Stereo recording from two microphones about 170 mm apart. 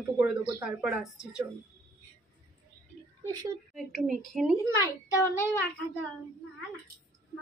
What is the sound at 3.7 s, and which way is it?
Speech, centre (ahead or behind).